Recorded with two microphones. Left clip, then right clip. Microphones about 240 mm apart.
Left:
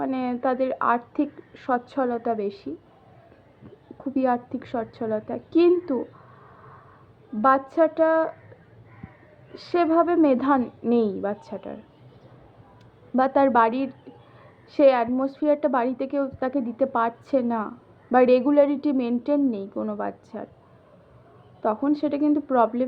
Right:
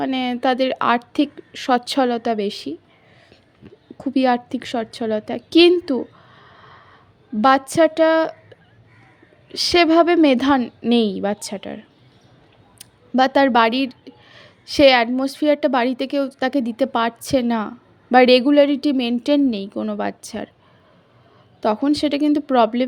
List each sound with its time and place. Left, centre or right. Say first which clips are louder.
0.0 s a woman's voice: right 5 dB; right
3.9 s a woman's voice: right 5 dB; right
7.4 s a woman's voice: right 5 dB; right
9.5 s a woman's voice: right 7 dB; right
13.1 s a woman's voice: right 4 dB; right
21.6 s a woman's voice: right 5 dB; right